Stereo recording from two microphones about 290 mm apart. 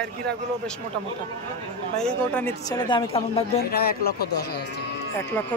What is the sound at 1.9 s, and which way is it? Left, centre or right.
Speech, centre.